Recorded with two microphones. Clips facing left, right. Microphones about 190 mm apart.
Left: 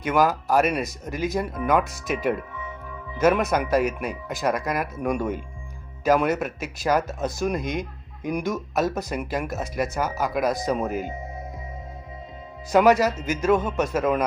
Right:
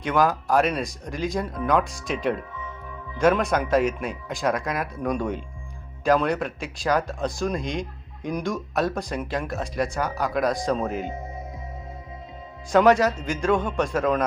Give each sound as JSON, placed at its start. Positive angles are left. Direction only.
{"t": 0.0, "sound": "speech", "side_deg": 0}
{"t": 12.7, "sound": "speech", "side_deg": 5}